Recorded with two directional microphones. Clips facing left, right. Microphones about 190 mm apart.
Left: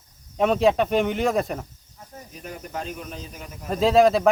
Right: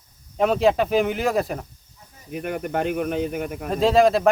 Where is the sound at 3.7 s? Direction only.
Centre (ahead or behind).